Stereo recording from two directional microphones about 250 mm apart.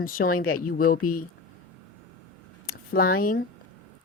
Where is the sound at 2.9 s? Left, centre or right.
Left.